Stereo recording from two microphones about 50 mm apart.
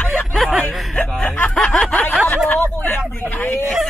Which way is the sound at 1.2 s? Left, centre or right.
Left.